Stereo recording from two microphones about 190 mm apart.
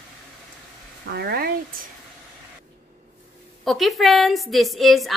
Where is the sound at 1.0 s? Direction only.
55° right (ahead or behind).